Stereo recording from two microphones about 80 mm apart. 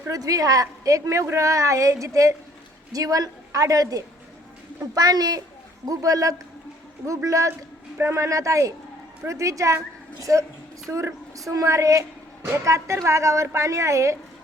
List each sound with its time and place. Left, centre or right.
0.1 s a woman's voice: right